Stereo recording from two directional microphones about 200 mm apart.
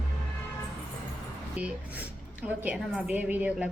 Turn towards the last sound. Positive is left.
turn(degrees=-5)  # may be behind; listen again after turning